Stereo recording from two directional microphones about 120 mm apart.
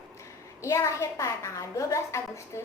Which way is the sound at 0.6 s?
25° left (ahead or behind).